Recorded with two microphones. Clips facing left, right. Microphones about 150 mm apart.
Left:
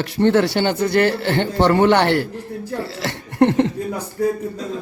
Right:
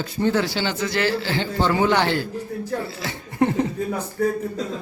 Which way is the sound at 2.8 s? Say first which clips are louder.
Left 4 dB; 75° left (ahead or behind).